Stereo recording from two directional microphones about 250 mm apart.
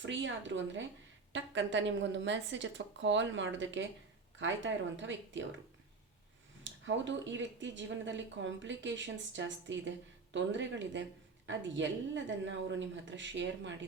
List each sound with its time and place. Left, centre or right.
0.0 s speech: right
6.7 s speech: right